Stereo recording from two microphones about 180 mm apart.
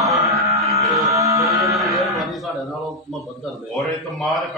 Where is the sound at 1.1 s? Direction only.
20° right (ahead or behind).